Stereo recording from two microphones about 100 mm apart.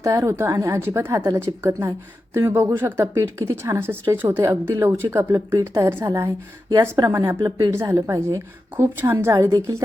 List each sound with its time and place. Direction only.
0.0 s a woman's voice: 30° right (ahead or behind)